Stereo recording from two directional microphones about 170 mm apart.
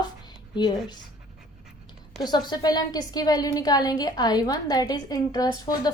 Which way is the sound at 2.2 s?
25° left (ahead or behind).